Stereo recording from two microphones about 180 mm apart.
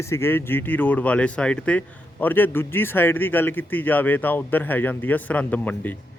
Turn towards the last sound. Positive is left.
turn(degrees=10)  # may be behind; listen again after turning